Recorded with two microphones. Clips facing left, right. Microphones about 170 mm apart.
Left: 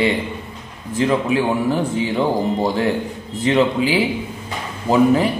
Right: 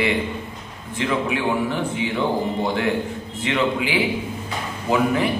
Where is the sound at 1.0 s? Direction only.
35° left (ahead or behind).